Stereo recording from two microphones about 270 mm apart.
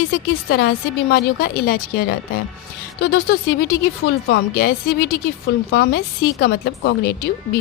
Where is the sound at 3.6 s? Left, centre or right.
Left.